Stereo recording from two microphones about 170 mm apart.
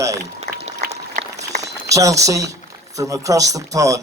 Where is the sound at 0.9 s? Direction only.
40° right (ahead or behind).